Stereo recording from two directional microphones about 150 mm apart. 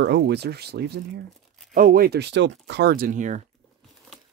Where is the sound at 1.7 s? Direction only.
75° right (ahead or behind).